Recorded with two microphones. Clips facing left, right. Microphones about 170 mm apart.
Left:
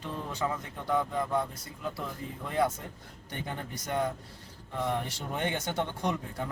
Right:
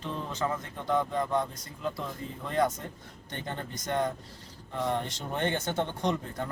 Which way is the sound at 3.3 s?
10° left (ahead or behind).